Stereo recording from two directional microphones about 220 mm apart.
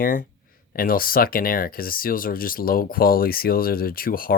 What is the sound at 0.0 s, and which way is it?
Speech, 40° left (ahead or behind).